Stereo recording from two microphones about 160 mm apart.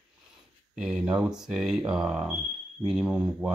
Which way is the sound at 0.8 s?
5° right (ahead or behind).